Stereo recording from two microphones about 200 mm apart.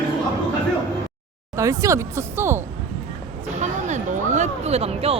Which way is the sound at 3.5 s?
35° right (ahead or behind).